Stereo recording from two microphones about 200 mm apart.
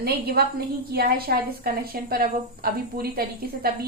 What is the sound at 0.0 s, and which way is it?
A woman's voice, 50° right (ahead or behind).